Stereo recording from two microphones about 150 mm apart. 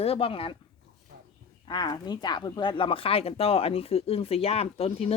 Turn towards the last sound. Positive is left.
turn(degrees=40)  # may be behind; listen again after turning